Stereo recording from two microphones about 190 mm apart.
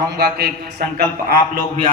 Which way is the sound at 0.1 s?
60° right (ahead or behind).